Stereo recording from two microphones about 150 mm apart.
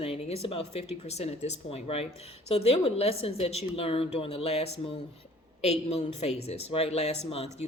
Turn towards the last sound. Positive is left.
turn(degrees=40)  # may be behind; listen again after turning